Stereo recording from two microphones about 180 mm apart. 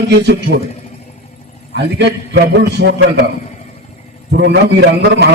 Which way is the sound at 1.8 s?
70° right (ahead or behind).